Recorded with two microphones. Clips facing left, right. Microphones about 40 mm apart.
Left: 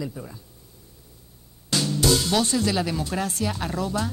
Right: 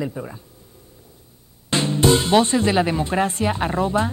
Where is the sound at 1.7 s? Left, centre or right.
Right.